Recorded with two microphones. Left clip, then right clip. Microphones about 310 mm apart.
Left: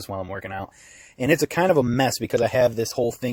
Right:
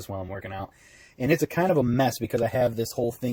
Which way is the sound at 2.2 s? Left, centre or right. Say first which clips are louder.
Left 5 dB; left.